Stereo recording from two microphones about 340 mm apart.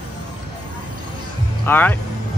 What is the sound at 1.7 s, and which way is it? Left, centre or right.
Speech, centre.